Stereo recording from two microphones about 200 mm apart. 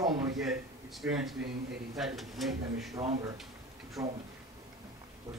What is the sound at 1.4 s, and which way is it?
Speech, 55° right (ahead or behind).